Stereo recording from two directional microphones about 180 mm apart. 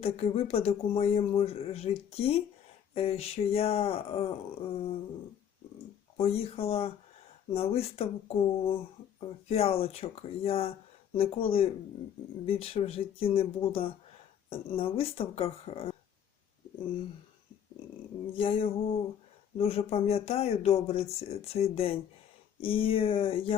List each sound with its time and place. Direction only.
0.0 s speech: 35° left (ahead or behind)
6.1 s speech: 35° left (ahead or behind)
14.5 s speech: 30° left (ahead or behind)
18.3 s speech: 30° left (ahead or behind)